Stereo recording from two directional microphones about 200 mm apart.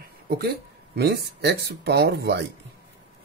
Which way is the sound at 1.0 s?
55° right (ahead or behind).